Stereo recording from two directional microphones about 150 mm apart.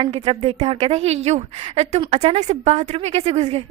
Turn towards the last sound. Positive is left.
turn(degrees=-45)  # may be behind; listen again after turning